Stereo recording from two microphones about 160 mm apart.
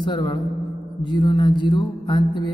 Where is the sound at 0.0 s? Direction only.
30° left (ahead or behind).